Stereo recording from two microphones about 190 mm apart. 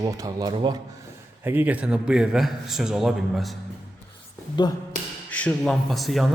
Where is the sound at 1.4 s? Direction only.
10° right (ahead or behind).